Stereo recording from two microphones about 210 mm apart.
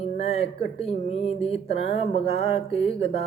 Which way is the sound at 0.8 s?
30° left (ahead or behind).